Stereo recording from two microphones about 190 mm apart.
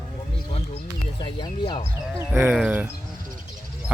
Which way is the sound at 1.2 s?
25° left (ahead or behind).